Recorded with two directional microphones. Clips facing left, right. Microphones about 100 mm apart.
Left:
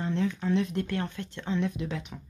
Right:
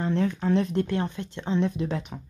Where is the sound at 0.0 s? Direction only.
50° right (ahead or behind).